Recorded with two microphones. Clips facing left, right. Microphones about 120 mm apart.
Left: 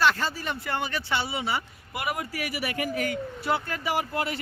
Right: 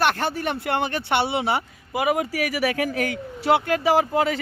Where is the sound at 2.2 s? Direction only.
90° right.